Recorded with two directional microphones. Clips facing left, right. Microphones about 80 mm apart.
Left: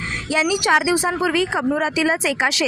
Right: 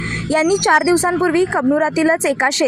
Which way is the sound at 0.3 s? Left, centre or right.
Right.